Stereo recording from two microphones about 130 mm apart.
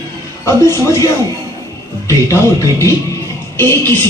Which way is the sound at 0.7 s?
25° left (ahead or behind).